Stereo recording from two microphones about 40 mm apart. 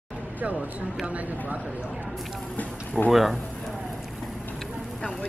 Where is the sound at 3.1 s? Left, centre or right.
Centre.